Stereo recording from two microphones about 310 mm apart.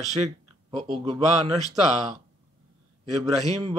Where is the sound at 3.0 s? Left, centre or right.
Centre.